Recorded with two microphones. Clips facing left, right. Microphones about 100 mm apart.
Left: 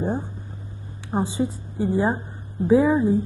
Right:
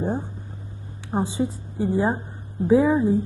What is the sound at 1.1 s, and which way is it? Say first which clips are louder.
Speech: even; 15° left (ahead or behind).